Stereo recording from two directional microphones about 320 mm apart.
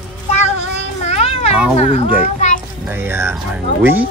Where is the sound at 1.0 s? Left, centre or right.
Centre.